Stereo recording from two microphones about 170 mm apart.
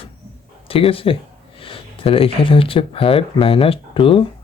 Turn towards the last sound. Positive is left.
turn(degrees=30)  # may be behind; listen again after turning